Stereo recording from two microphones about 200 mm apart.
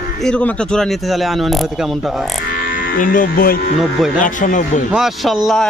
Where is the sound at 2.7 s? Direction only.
45° left (ahead or behind).